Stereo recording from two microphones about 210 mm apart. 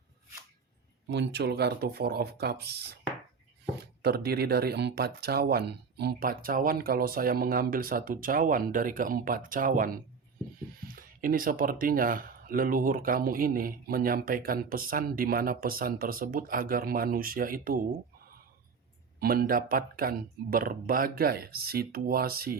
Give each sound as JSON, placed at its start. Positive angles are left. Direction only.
{"t": 1.1, "sound": "speech", "side_deg": -55}
{"t": 4.0, "sound": "speech", "side_deg": -50}
{"t": 19.2, "sound": "speech", "side_deg": -45}